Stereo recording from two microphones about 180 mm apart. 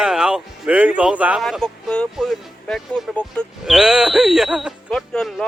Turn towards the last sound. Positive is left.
turn(degrees=5)  # may be behind; listen again after turning